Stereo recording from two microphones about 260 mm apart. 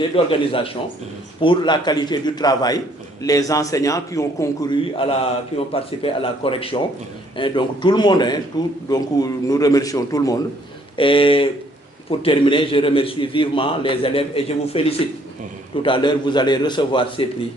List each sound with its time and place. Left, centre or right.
0.3 s a man's voice: centre